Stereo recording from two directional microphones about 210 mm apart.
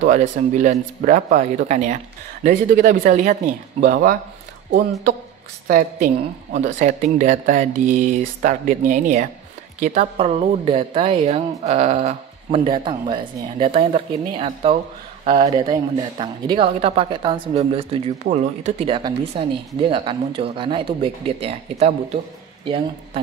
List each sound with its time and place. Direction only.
0.0 s a woman's voice: 35° right (ahead or behind)
5.7 s a woman's voice: 35° right (ahead or behind)